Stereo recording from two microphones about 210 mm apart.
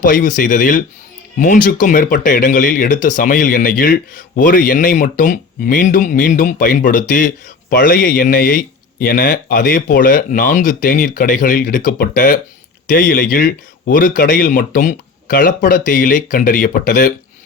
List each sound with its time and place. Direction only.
0.0 s a man's voice: 40° left (ahead or behind)